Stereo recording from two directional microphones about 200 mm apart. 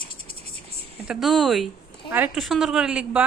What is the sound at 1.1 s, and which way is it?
Speech, centre (ahead or behind).